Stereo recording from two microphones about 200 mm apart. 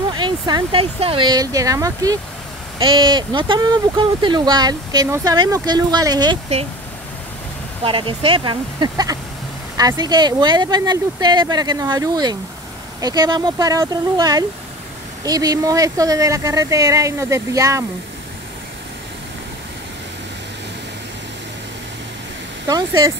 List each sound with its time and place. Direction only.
0.1 s speech: 20° right (ahead or behind)
7.8 s speech: 25° right (ahead or behind)
22.7 s speech: 20° right (ahead or behind)